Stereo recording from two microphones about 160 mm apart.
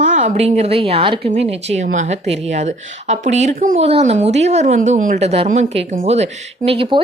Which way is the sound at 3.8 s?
40° right (ahead or behind).